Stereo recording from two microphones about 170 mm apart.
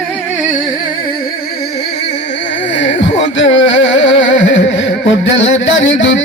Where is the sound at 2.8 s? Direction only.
90° left.